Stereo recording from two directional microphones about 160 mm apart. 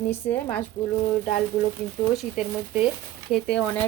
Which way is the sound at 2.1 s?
5° right (ahead or behind).